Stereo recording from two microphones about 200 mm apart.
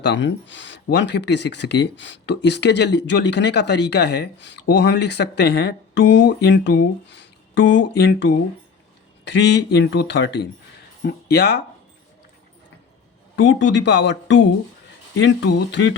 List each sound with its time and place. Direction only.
0.0 s speech: 60° left (ahead or behind)
13.3 s speech: 65° left (ahead or behind)